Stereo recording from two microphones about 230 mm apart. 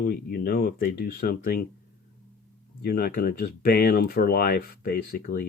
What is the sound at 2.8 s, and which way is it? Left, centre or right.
Speech, left.